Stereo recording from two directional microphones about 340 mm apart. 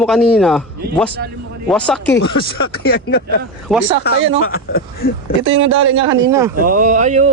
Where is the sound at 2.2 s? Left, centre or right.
Left.